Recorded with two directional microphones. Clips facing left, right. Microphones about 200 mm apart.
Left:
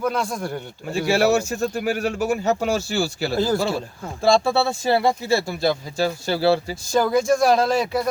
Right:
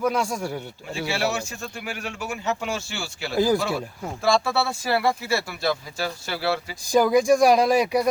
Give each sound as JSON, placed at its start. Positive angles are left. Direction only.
{"t": 0.0, "sound": "speech", "side_deg": -10}
{"t": 0.9, "sound": "speech", "side_deg": 45}
{"t": 3.3, "sound": "speech", "side_deg": -15}
{"t": 4.2, "sound": "speech", "side_deg": 30}
{"t": 6.9, "sound": "speech", "side_deg": -15}